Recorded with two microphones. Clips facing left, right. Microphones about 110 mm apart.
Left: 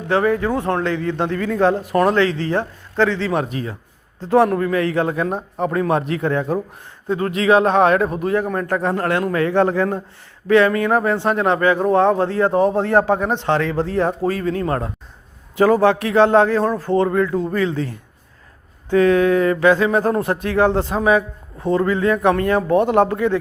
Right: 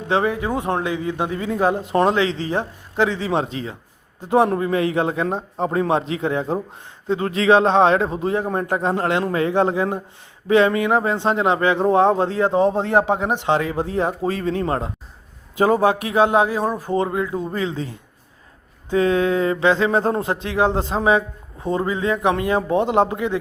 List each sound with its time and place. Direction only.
0.1 s a man's voice: 20° right (ahead or behind)